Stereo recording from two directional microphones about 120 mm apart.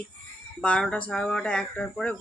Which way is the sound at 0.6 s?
10° left (ahead or behind).